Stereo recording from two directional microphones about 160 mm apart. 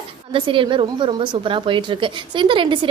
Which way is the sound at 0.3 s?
30° right (ahead or behind).